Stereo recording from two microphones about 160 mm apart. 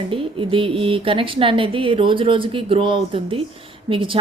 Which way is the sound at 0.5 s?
35° right (ahead or behind).